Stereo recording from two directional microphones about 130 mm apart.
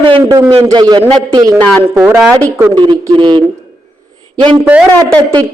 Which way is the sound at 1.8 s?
15° right (ahead or behind).